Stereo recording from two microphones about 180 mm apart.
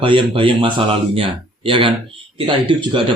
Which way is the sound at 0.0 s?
30° right (ahead or behind).